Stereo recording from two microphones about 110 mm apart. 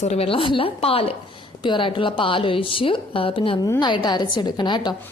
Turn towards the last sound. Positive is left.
turn(degrees=45)  # may be behind; listen again after turning